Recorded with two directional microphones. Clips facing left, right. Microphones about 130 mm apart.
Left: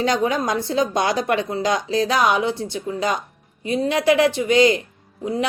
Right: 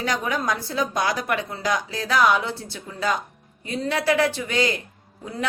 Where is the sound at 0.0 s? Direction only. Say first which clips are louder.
Left 5 dB; 25° left (ahead or behind).